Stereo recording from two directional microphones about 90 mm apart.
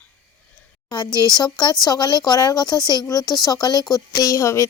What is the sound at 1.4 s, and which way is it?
A woman's voice, 50° left (ahead or behind).